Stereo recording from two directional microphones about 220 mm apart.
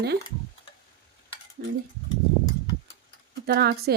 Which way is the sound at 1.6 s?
45° right (ahead or behind).